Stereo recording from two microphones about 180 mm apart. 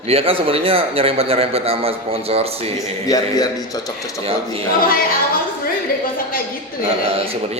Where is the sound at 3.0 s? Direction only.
20° left (ahead or behind).